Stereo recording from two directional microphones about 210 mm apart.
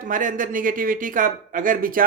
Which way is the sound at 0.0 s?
40° right (ahead or behind).